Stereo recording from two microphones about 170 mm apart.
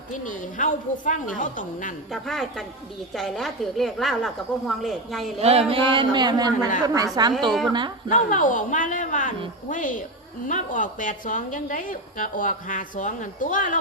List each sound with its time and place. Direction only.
0.1 s a woman's voice: 50° left (ahead or behind)
2.2 s a woman's voice: centre (ahead or behind)
5.4 s a man's voice: 35° right (ahead or behind)
8.1 s a woman's voice: 50° left (ahead or behind)